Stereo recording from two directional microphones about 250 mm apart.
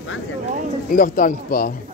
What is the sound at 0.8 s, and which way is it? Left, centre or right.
Speech, left.